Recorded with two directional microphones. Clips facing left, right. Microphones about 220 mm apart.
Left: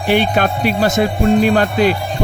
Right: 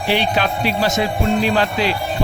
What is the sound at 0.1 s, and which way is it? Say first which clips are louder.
Speech: left 4 dB; 50° left (ahead or behind).